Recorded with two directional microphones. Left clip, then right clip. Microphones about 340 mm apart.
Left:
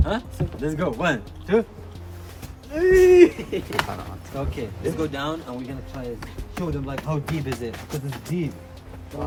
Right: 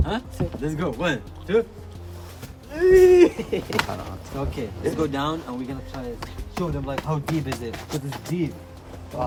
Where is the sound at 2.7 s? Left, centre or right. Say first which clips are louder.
Even; centre.